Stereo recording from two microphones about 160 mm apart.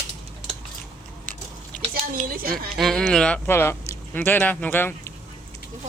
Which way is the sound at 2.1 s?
60° right (ahead or behind).